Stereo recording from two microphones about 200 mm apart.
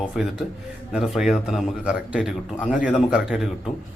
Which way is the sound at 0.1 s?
Centre (ahead or behind).